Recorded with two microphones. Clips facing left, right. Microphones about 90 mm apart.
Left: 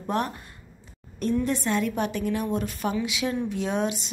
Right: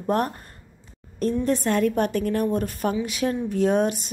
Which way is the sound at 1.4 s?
45° right (ahead or behind).